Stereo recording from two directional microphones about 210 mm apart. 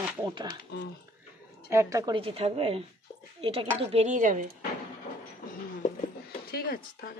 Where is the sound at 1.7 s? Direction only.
15° right (ahead or behind).